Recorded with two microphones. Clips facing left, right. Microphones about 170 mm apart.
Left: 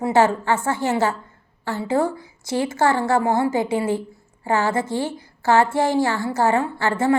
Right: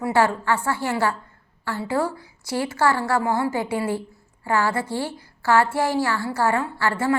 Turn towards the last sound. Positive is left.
turn(degrees=25)  # may be behind; listen again after turning